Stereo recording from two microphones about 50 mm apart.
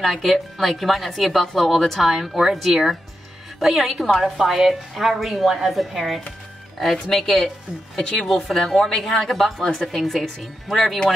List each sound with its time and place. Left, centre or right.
0.0 s speech: centre